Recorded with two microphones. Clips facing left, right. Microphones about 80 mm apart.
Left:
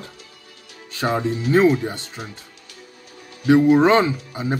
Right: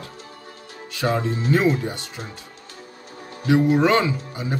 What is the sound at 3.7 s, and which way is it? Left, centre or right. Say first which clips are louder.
Speech: left 3 dB; left.